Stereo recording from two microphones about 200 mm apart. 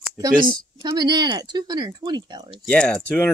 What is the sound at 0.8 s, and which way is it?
Speech, 20° right (ahead or behind).